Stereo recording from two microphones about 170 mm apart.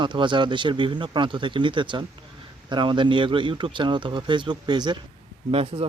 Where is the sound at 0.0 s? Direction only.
30° right (ahead or behind).